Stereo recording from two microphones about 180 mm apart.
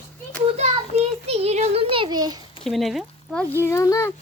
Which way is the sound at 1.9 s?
25° right (ahead or behind).